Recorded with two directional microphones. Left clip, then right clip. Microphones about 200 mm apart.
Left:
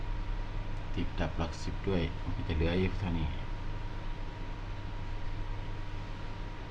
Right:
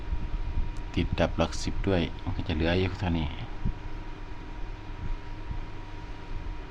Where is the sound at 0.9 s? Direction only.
55° right (ahead or behind).